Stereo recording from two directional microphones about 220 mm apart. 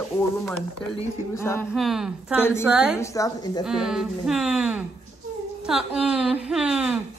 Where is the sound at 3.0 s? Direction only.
15° left (ahead or behind).